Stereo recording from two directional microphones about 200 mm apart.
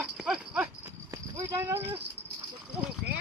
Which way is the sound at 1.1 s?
15° right (ahead or behind).